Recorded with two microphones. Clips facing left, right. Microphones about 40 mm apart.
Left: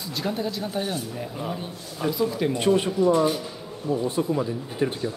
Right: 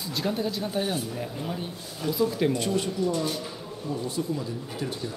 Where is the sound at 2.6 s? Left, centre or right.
Left.